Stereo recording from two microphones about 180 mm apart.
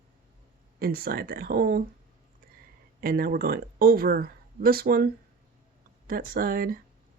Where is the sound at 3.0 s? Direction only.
55° right (ahead or behind).